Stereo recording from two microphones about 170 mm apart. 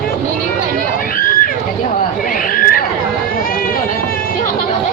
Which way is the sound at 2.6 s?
60° left (ahead or behind).